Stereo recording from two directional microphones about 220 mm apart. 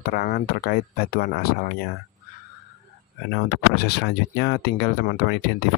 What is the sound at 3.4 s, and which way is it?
Speech, 45° left (ahead or behind).